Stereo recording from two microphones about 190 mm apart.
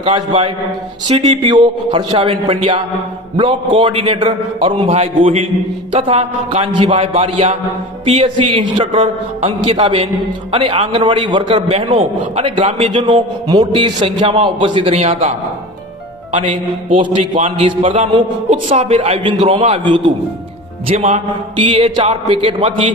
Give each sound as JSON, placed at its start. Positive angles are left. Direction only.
{"t": 0.0, "sound": "a man's voice", "side_deg": -30}
{"t": 17.4, "sound": "a man's voice", "side_deg": -30}